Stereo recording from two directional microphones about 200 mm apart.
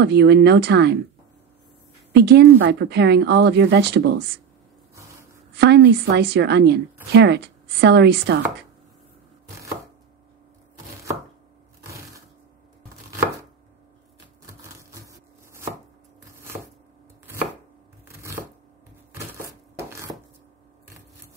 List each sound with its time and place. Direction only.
0.0 s speech: 55° right (ahead or behind)
2.1 s speech: 55° right (ahead or behind)
5.6 s speech: 55° right (ahead or behind)
14.4 s a sound: 15° right (ahead or behind)
18.0 s chopping: 10° right (ahead or behind)
19.1 s a sound: 15° right (ahead or behind)